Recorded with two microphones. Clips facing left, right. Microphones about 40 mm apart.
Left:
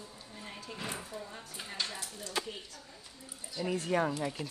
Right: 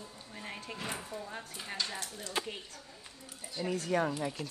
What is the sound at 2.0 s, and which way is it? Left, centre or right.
Speech, right.